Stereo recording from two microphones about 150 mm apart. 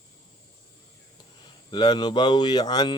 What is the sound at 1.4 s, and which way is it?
Speech, 30° left (ahead or behind).